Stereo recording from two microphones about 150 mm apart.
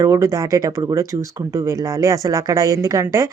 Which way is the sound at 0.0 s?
20° right (ahead or behind).